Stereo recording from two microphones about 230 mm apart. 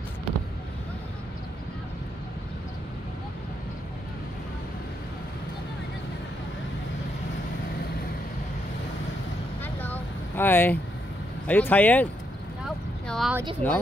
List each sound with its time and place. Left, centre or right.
9.8 s vehicle: centre
11.4 s speech: centre
12.6 s vehicle: centre
13.6 s speech: centre